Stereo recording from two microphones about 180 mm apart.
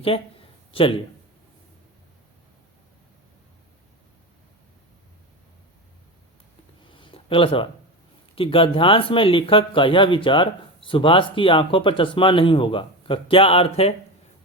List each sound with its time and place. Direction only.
0.7 s speech: 30° left (ahead or behind)
6.9 s a sound: 30° left (ahead or behind)
8.4 s speech: 30° left (ahead or behind)